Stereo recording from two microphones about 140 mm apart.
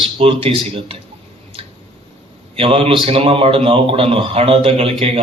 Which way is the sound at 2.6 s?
40° right (ahead or behind).